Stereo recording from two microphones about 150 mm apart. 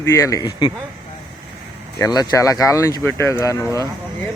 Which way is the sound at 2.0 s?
25° left (ahead or behind).